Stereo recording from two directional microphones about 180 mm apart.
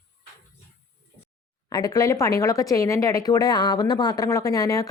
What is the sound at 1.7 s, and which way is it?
Speech, 20° left (ahead or behind).